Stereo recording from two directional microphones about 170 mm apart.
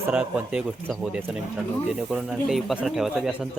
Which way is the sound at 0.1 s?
5° right (ahead or behind).